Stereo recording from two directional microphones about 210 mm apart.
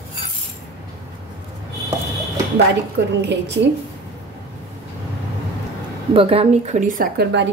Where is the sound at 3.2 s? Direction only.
55° right (ahead or behind).